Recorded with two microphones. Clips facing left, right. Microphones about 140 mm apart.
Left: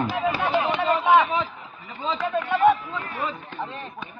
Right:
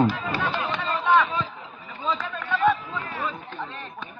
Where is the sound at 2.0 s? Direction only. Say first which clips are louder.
Left 4 dB; 25° left (ahead or behind).